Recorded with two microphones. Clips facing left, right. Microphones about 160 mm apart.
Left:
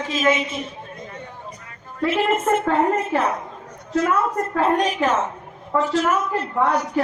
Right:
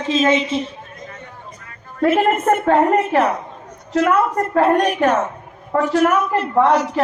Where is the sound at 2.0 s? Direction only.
50° right (ahead or behind).